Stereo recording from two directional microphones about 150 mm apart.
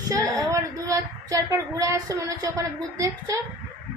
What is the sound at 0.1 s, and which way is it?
A woman's voice, 25° right (ahead or behind).